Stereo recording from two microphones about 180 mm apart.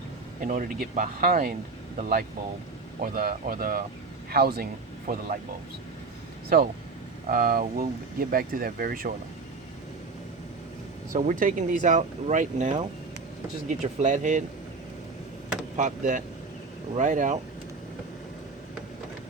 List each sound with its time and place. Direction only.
0.4 s speech: 45° right (ahead or behind)
7.3 s speech: 50° right (ahead or behind)
11.1 s speech: 50° right (ahead or behind)
15.8 s speech: 45° right (ahead or behind)